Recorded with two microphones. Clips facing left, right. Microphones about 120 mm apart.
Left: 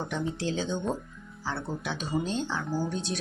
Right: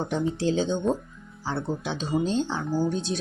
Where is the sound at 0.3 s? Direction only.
30° right (ahead or behind).